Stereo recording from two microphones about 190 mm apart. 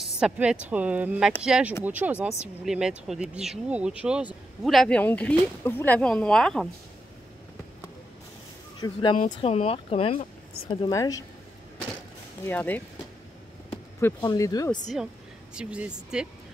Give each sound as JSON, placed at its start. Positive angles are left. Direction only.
{"t": 0.0, "sound": "a woman's voice", "side_deg": -5}
{"t": 8.8, "sound": "speech", "side_deg": 20}
{"t": 12.4, "sound": "speech", "side_deg": 10}
{"t": 14.2, "sound": "speech", "side_deg": 20}
{"t": 15.5, "sound": "speech", "side_deg": -5}